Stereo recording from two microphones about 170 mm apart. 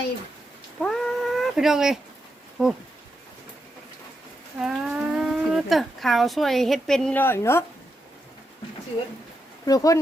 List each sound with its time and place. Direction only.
0.8 s cat: 5° left (ahead or behind)
2.6 s speech: 5° right (ahead or behind)
4.6 s speech: 5° right (ahead or behind); by 7.6 s 15° left (ahead or behind)
9.6 s speech: 20° left (ahead or behind)